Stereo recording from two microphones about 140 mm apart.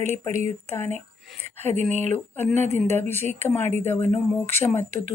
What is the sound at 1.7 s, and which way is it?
Speech, 55° right (ahead or behind).